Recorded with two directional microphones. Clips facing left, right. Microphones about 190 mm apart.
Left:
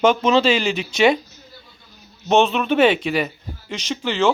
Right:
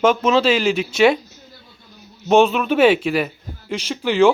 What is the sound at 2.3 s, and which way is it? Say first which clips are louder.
Speech: right 2 dB; 5° right (ahead or behind).